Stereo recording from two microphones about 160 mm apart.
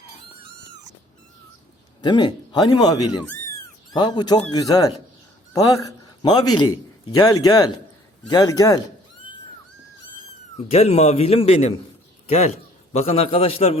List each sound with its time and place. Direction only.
2.0 s speech: 25° left (ahead or behind)
10.6 s a man's voice: 40° left (ahead or behind)